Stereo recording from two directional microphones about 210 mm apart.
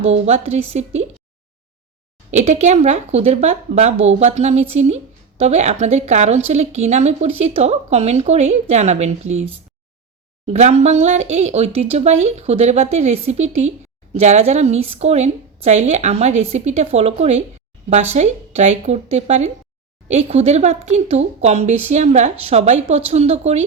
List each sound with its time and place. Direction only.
0.3 s a woman's voice: 30° right (ahead or behind)
2.3 s a woman's voice: 30° right (ahead or behind)